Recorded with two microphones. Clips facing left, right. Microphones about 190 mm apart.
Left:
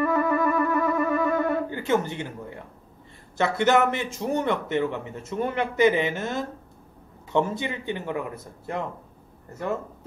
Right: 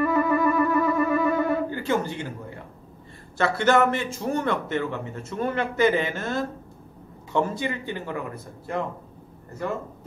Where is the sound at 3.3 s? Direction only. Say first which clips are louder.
Even; 20° left (ahead or behind).